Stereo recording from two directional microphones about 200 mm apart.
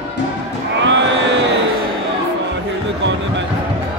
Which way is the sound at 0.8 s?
65° right (ahead or behind).